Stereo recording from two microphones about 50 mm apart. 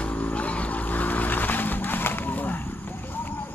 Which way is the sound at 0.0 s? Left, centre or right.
Left.